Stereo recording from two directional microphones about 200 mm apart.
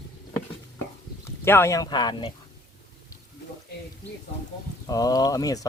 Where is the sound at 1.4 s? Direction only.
10° left (ahead or behind).